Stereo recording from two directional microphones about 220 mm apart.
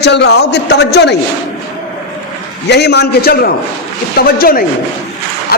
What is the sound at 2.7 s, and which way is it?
A man's voice, 50° left (ahead or behind).